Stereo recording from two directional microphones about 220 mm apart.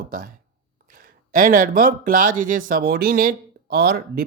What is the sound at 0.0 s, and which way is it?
Speech, 40° right (ahead or behind).